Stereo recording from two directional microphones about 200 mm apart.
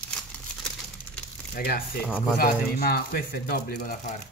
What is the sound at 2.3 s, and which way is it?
Speech, 50° left (ahead or behind).